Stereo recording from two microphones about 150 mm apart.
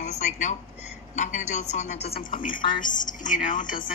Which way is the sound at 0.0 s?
50° left (ahead or behind).